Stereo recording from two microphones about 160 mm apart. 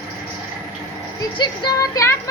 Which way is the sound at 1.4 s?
25° left (ahead or behind).